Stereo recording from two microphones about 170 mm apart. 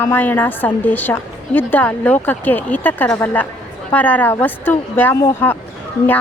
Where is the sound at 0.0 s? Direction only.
10° left (ahead or behind).